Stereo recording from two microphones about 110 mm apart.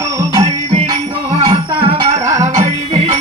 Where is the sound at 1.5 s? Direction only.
60° right (ahead or behind).